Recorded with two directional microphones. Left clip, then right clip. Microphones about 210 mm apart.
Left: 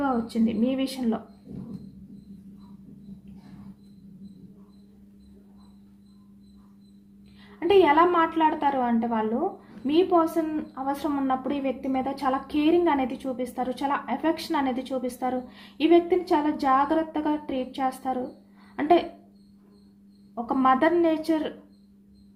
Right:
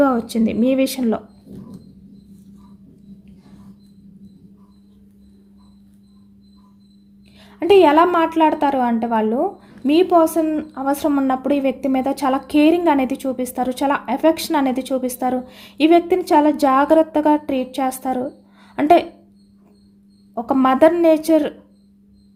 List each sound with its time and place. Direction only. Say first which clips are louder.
0.0 s a woman's voice: right 9 dB; 55° right (ahead or behind)
7.7 s a woman's voice: right 7 dB; 55° right (ahead or behind)
20.3 s a woman's voice: right 5 dB; 55° right (ahead or behind)